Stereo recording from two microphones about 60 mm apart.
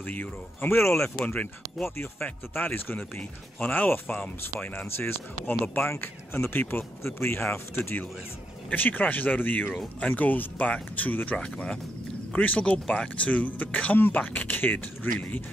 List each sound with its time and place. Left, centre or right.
0.0 s speech: left
1.2 s speech: left
2.5 s speech: left
11.3 s speech: centre